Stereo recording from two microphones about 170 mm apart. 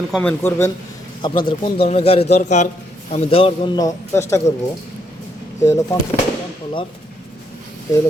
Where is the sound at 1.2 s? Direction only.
30° left (ahead or behind).